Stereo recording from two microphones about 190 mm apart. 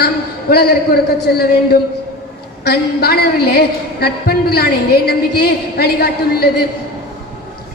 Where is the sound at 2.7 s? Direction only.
55° left (ahead or behind).